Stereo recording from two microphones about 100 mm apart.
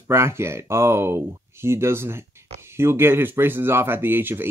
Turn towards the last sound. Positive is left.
turn(degrees=-20)  # may be behind; listen again after turning